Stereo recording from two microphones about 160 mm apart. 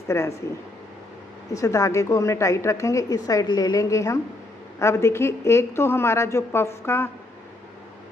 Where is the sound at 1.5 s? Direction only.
20° left (ahead or behind).